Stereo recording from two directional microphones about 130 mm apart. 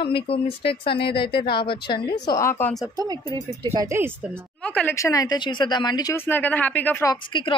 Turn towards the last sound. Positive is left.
turn(degrees=40)  # may be behind; listen again after turning